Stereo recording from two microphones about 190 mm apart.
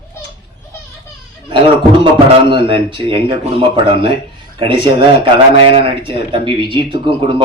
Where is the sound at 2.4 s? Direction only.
25° right (ahead or behind).